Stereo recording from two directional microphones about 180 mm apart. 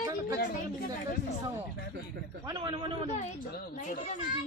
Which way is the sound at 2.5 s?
25° right (ahead or behind).